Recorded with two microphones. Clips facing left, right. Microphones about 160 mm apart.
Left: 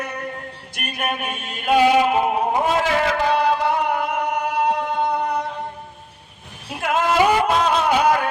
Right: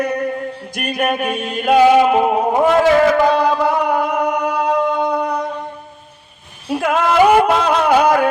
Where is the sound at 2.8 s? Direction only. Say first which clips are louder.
Right 8 dB; 50° right (ahead or behind).